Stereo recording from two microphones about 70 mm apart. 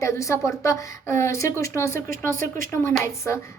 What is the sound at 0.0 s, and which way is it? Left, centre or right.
A woman's voice, left.